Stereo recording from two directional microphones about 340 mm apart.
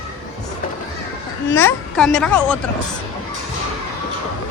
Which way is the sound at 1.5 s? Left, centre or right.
Centre.